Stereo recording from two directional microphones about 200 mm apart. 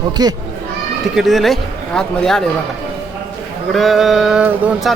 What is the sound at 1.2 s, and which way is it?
Speech, centre (ahead or behind).